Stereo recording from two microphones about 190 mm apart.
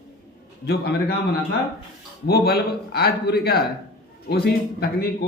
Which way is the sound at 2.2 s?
55° left (ahead or behind).